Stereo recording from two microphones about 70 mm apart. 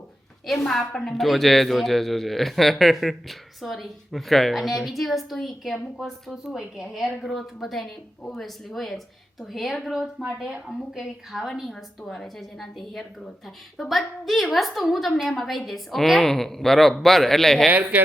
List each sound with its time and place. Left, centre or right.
0.4 s a woman's voice: centre
17.7 s speech: right